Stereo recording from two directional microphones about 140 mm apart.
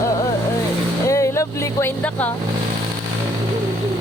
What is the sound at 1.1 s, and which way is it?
Vehicle, 20° left (ahead or behind).